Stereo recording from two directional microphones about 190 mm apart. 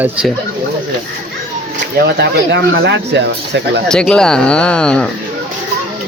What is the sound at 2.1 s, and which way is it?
Speech, 65° right (ahead or behind).